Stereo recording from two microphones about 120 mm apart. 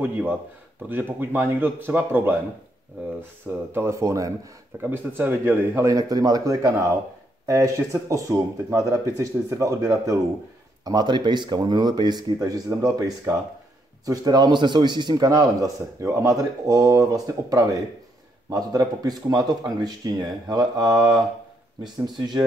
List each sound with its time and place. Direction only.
0.0 s a man's voice: 15° right (ahead or behind); by 20.9 s 35° right (ahead or behind)
22.0 s a man's voice: 35° right (ahead or behind)